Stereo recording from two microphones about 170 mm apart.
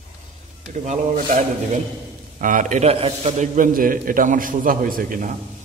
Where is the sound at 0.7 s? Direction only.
45° right (ahead or behind).